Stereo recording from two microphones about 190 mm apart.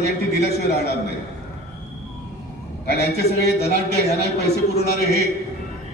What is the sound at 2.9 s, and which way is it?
Speech, 60° left (ahead or behind).